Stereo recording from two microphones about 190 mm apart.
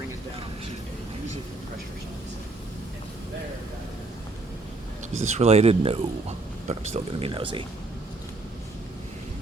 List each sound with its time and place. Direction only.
5.1 s speech: 35° right (ahead or behind)